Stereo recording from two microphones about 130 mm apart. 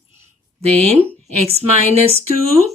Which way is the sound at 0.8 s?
50° right (ahead or behind).